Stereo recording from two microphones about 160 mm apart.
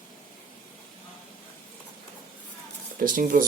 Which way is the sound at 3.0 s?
60° right (ahead or behind).